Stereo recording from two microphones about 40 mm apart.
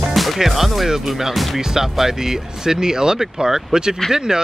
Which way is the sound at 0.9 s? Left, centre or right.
Centre.